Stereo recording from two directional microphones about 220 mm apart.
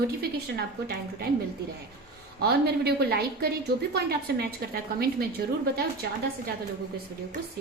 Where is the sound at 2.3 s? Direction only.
45° right (ahead or behind).